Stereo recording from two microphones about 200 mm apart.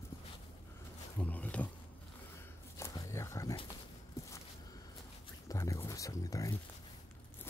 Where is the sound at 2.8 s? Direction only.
15° left (ahead or behind).